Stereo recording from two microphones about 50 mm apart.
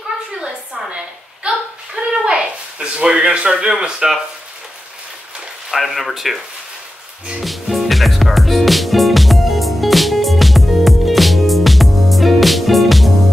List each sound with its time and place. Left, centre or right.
0.4 s a sound: centre
5.7 s speech: centre
7.3 s music: centre